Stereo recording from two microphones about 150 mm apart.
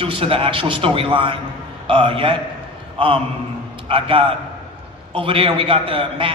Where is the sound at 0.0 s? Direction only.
35° right (ahead or behind).